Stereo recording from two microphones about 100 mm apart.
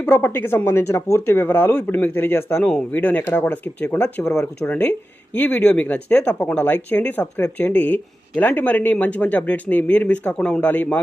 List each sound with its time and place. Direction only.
0.0 s speech: 25° left (ahead or behind)